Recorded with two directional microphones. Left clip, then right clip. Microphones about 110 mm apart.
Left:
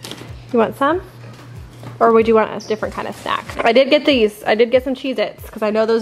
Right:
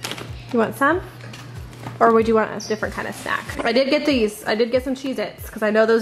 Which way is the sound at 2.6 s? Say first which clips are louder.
Left 3 dB; 15° right (ahead or behind).